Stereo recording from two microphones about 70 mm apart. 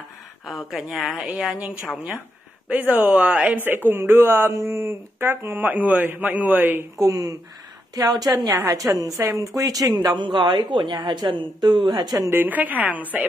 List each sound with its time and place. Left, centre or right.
0.5 s speech: centre
2.7 s speech: right
5.2 s speech: right
7.0 s a woman's voice: right
8.5 s a woman's voice: right
9.6 s a woman's voice: right
10.1 s a woman's voice: right
12.3 s speech: right